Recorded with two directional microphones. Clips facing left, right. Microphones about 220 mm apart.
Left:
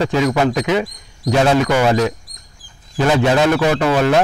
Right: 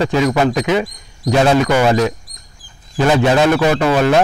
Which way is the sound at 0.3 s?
30° right (ahead or behind).